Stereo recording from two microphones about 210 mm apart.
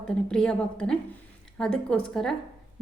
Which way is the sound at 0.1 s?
5° left (ahead or behind).